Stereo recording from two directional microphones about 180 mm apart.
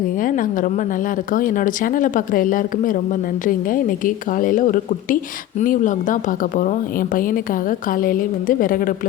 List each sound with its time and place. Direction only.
0.2 s speech: 50° left (ahead or behind)